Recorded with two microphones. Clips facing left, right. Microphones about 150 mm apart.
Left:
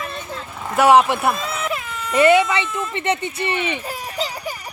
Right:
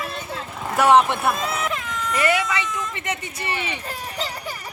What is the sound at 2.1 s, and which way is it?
Speech, 25° left (ahead or behind).